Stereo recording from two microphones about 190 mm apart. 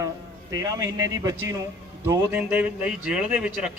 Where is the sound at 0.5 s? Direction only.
20° right (ahead or behind).